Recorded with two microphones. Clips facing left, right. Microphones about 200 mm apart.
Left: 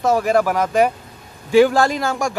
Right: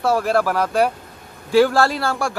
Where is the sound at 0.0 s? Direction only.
15° left (ahead or behind).